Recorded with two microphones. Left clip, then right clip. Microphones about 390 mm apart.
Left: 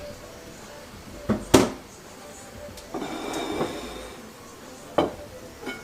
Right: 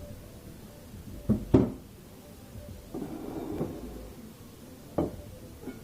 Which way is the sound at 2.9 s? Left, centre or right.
Centre.